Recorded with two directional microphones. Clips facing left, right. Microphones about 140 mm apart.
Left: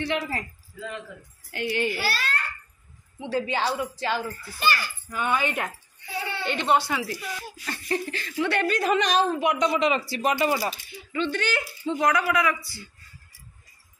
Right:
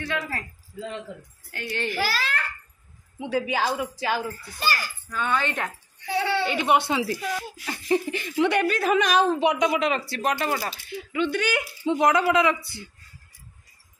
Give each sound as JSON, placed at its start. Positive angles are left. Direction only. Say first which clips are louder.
{"t": 0.0, "sound": "speech", "louder": "left 2 dB", "side_deg": 20}
{"t": 0.7, "sound": "a woman's voice", "louder": "right 2 dB", "side_deg": -30}
{"t": 1.5, "sound": "speech", "louder": "left 4 dB", "side_deg": 10}
{"t": 3.2, "sound": "speech", "louder": "right 1 dB", "side_deg": -10}
{"t": 4.6, "sound": "a child's voice", "louder": "left 2 dB", "side_deg": -40}
{"t": 5.1, "sound": "speech", "louder": "even", "side_deg": 10}
{"t": 5.9, "sound": "a sound", "louder": "right 9 dB", "side_deg": -90}
{"t": 6.4, "sound": "speech", "louder": "left 1 dB", "side_deg": -5}
{"t": 6.8, "sound": "a woman's voice", "louder": "right 4 dB", "side_deg": -25}
{"t": 11.1, "sound": "a woman's voice", "louder": "right 2 dB", "side_deg": -10}